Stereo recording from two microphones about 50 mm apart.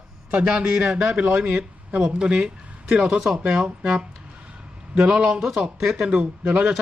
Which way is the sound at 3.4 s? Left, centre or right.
Right.